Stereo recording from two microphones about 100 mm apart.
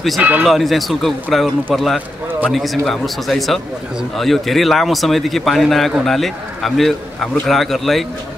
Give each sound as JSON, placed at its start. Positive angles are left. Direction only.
{"t": 0.2, "sound": "speech", "side_deg": -15}
{"t": 0.5, "sound": "a man's voice", "side_deg": 0}